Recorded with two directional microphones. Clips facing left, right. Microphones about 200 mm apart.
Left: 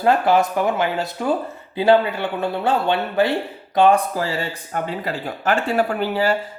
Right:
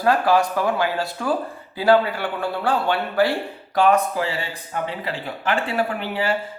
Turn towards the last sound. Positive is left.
turn(degrees=40)  # may be behind; listen again after turning